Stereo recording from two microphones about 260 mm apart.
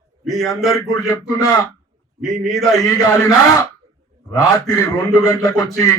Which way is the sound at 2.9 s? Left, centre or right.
Centre.